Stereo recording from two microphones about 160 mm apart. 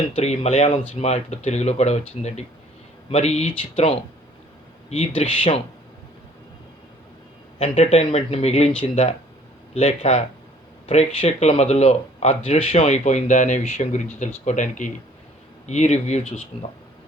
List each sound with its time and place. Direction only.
0.2 s speech: 40° left (ahead or behind)
7.8 s speech: 40° left (ahead or behind)